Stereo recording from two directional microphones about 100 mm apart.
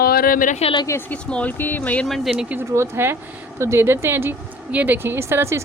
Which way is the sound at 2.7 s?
25° right (ahead or behind).